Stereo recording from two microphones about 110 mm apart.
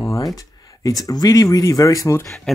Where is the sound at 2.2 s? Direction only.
5° left (ahead or behind).